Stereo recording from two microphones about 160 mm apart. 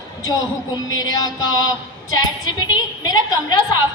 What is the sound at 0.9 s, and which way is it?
A man's voice, 25° left (ahead or behind).